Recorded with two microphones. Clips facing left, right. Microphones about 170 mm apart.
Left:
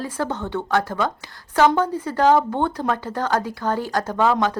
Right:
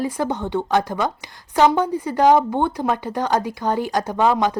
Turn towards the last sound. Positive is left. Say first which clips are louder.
# right 1 dB
turn(degrees=-15)  # may be behind; listen again after turning